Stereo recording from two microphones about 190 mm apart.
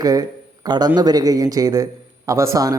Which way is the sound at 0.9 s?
20° right (ahead or behind).